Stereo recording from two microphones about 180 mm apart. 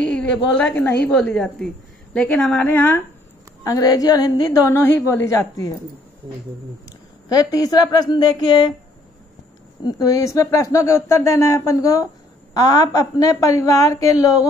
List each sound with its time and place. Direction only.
0.0 s a sound: 5° left (ahead or behind)
0.6 s a woman's voice: 10° left (ahead or behind)
7.3 s a woman's voice: 20° left (ahead or behind)
9.8 s a woman's voice: 20° left (ahead or behind)